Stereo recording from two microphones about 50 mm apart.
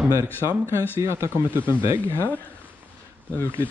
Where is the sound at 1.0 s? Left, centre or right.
Right.